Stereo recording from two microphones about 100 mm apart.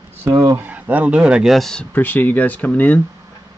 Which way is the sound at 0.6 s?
15° right (ahead or behind).